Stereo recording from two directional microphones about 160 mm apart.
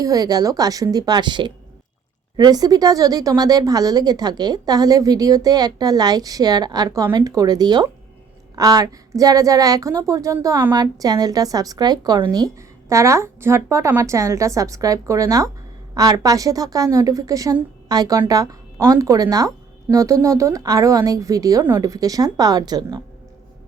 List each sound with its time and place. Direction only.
0.0 s a woman's voice: 25° right (ahead or behind)